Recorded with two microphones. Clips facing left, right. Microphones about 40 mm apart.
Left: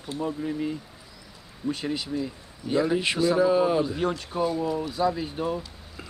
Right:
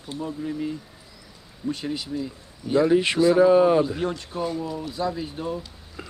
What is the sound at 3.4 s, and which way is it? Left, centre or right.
Speech, centre.